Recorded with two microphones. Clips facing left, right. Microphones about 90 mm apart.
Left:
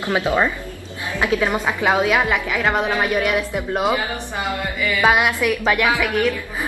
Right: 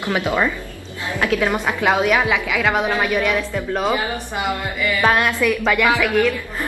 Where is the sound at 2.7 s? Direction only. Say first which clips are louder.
Even; 10° right (ahead or behind).